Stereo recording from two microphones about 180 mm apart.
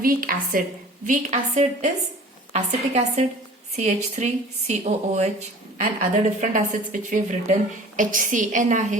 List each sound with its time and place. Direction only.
0.0 s a woman's voice: 50° right (ahead or behind)